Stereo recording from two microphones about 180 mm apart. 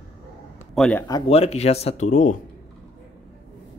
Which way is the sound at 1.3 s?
35° left (ahead or behind).